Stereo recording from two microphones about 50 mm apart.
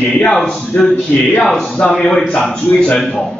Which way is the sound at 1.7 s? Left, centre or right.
Centre.